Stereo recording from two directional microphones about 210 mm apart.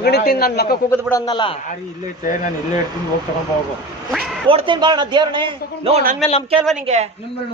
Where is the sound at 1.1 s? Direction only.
20° left (ahead or behind).